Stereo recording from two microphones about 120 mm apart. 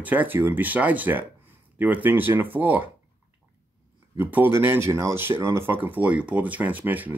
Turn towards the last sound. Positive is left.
turn(degrees=-15)  # may be behind; listen again after turning